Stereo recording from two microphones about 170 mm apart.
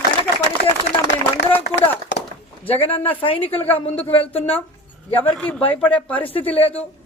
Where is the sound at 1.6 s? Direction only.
80° left.